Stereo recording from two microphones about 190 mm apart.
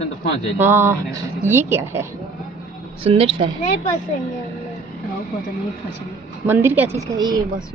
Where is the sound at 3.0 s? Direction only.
30° right (ahead or behind).